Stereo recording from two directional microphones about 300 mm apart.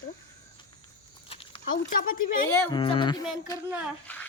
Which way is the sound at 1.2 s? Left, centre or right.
Centre.